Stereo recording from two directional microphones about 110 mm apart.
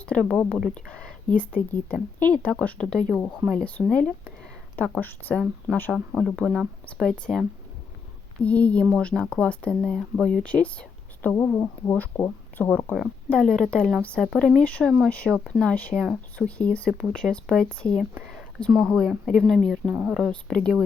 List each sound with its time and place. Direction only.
0.1 s a woman's voice: 10° left (ahead or behind)
8.4 s a woman's voice: 10° left (ahead or behind)